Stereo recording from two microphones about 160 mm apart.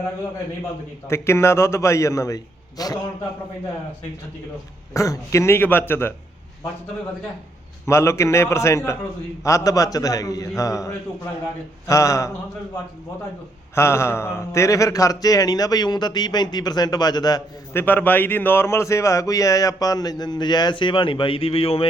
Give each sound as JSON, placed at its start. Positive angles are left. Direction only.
{"t": 1.0, "sound": "a man's voice", "side_deg": 15}
{"t": 4.9, "sound": "a man's voice", "side_deg": 20}
{"t": 7.9, "sound": "a man's voice", "side_deg": 15}
{"t": 13.7, "sound": "a man's voice", "side_deg": 15}
{"t": 17.8, "sound": "a man's voice", "side_deg": 10}